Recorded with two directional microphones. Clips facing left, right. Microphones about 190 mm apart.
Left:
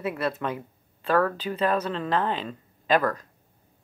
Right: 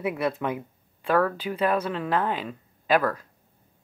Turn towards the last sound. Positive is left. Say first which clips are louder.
# even
turn(degrees=-10)  # may be behind; listen again after turning